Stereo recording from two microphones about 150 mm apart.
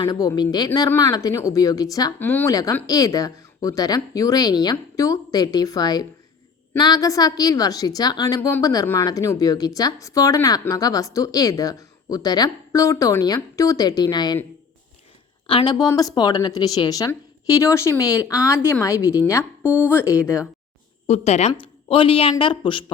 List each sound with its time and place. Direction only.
0.0 s a woman's voice: 25° left (ahead or behind)
2.1 s a woman's voice: 15° left (ahead or behind); by 14.3 s 30° left (ahead or behind)
15.4 s a woman's voice: 30° left (ahead or behind)
19.6 s speech: 10° right (ahead or behind)
19.9 s a woman's voice: 15° left (ahead or behind)
21.1 s speech: 45° left (ahead or behind)